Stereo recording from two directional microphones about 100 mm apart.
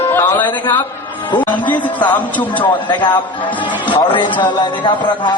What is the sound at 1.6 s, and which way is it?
A man's voice, 50° left (ahead or behind).